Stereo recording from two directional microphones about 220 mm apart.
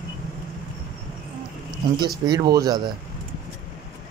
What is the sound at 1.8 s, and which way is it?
Speech, 20° right (ahead or behind).